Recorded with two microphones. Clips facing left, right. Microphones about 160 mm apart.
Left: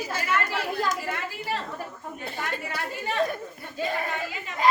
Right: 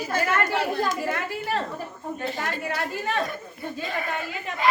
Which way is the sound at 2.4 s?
60° right (ahead or behind).